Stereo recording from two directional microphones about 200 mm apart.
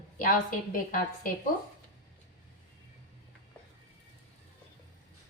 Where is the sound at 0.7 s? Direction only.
45° left (ahead or behind).